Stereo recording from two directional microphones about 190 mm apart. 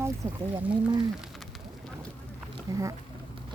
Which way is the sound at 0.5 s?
25° right (ahead or behind).